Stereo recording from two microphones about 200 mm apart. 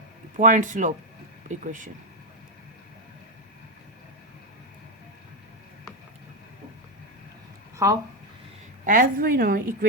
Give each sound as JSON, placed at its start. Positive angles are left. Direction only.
{"t": 0.3, "sound": "speech", "side_deg": -40}
{"t": 7.8, "sound": "speech", "side_deg": -15}
{"t": 8.9, "sound": "a woman's voice", "side_deg": -45}